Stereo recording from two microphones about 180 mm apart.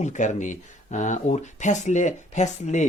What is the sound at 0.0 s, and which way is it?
Speech, 40° left (ahead or behind).